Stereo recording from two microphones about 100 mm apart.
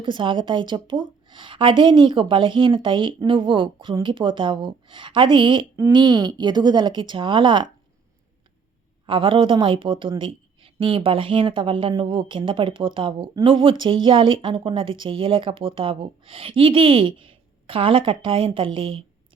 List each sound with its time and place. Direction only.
0.0 s a woman's voice: 55° right (ahead or behind)
9.0 s speech: 60° right (ahead or behind)